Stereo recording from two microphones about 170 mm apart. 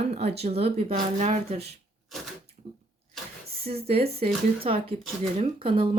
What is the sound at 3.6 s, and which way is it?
Speech, 35° right (ahead or behind).